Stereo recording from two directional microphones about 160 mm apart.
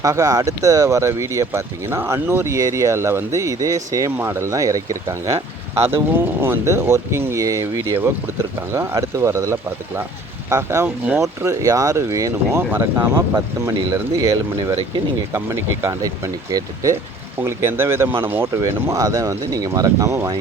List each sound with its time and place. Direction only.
0.0 s speech: 20° right (ahead or behind)
6.4 s speech: 15° right (ahead or behind)